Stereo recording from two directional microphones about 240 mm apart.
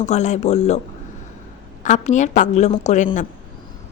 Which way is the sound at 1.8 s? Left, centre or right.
Left.